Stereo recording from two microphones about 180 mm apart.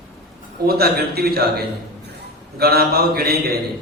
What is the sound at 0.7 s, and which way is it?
Speech, 60° right (ahead or behind).